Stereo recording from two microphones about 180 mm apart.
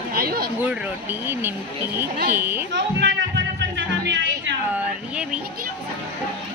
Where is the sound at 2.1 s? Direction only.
60° right (ahead or behind).